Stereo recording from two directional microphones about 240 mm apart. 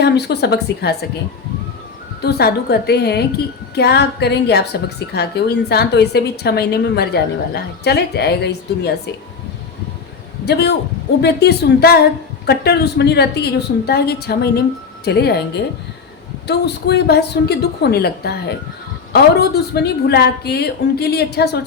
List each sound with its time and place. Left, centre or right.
0.0 s a woman's voice: left
2.2 s a woman's voice: left
10.4 s a woman's voice: left